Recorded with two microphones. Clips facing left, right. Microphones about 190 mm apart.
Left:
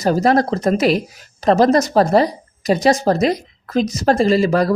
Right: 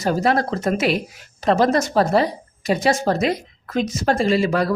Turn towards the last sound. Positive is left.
turn(degrees=40)  # may be behind; listen again after turning